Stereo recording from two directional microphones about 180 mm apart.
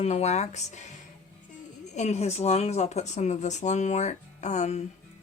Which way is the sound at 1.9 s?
40° left (ahead or behind).